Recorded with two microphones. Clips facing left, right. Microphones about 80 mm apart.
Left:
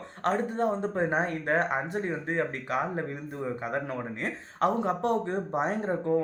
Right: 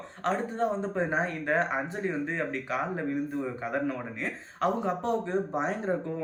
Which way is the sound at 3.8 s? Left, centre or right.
Left.